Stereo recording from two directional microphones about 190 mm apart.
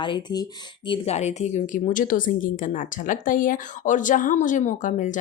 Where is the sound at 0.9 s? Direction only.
35° left (ahead or behind).